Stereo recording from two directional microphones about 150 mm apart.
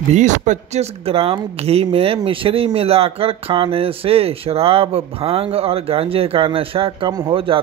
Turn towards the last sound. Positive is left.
turn(degrees=-25)  # may be behind; listen again after turning